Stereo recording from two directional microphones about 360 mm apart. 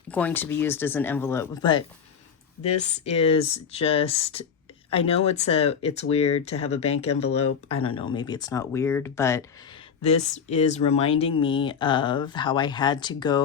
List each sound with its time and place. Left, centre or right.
0.1 s speech: centre
2.8 s speech: centre
10.0 s speech: centre